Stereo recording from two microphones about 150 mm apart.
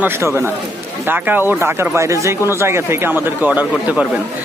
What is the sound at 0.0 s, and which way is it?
A man's voice, 15° right (ahead or behind).